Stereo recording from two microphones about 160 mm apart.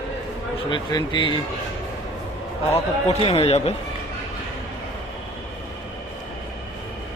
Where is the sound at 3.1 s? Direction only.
35° left (ahead or behind).